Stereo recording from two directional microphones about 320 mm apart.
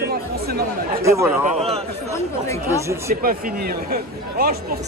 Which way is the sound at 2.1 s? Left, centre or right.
Centre.